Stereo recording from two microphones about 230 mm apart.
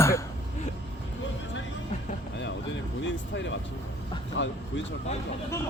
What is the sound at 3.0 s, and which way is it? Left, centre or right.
Speech, left.